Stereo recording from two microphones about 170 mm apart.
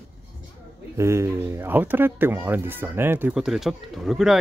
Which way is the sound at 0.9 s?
15° right (ahead or behind).